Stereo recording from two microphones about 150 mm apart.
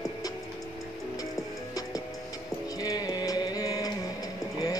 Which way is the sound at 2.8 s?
25° left (ahead or behind).